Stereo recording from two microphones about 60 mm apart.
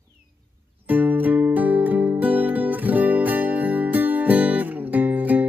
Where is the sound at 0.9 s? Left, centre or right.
Right.